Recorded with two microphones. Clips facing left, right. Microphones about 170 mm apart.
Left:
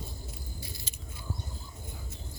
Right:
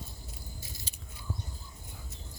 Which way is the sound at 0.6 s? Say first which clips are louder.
Left 3 dB; 45° right (ahead or behind).